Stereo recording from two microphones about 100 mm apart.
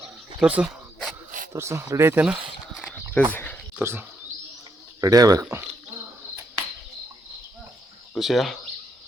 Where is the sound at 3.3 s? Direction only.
20° left (ahead or behind).